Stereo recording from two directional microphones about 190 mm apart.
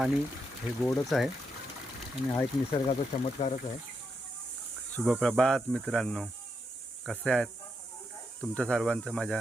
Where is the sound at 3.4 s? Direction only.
35° left (ahead or behind).